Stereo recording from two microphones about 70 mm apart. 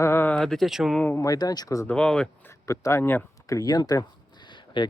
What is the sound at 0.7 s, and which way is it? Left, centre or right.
Speech, centre.